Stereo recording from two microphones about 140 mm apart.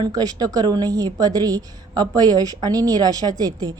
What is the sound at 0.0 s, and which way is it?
A woman's voice, 30° right (ahead or behind).